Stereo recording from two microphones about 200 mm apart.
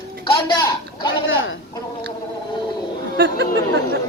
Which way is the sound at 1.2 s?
75° left (ahead or behind).